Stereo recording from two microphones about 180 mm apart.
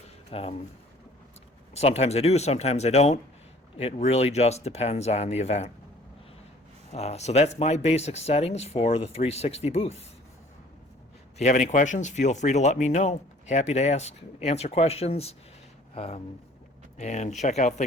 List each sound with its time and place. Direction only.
0.3 s speech: 30° left (ahead or behind)
1.7 s speech: 35° left (ahead or behind)
6.9 s speech: 35° left (ahead or behind)
11.3 s speech: 40° left (ahead or behind)